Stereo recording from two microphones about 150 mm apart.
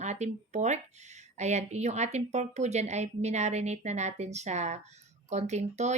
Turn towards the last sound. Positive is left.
turn(degrees=-50)  # may be behind; listen again after turning